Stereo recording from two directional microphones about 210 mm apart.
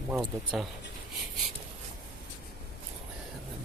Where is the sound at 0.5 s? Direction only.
Centre (ahead or behind).